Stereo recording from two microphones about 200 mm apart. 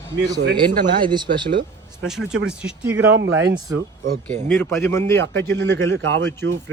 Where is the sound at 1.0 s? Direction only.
20° right (ahead or behind).